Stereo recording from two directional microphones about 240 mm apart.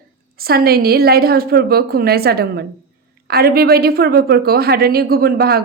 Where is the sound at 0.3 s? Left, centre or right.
Right.